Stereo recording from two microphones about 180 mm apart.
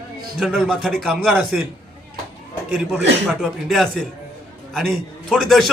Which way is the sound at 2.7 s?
5° right (ahead or behind).